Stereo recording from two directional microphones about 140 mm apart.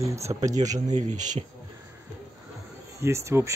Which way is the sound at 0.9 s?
60° right (ahead or behind).